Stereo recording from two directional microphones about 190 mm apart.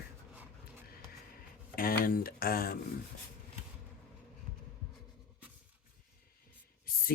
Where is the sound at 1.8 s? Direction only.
50° left (ahead or behind).